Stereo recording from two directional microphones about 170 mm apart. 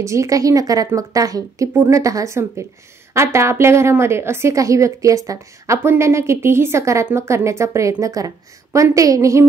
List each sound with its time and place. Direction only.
0.0 s a woman's voice: 15° right (ahead or behind)